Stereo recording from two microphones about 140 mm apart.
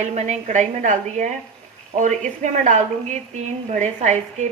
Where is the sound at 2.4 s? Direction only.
65° right (ahead or behind).